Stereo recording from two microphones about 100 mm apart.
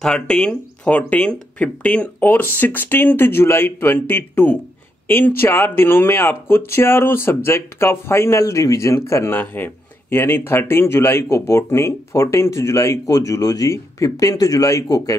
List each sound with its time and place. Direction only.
0.0 s speech: 10° left (ahead or behind); by 15.1 s 35° left (ahead or behind)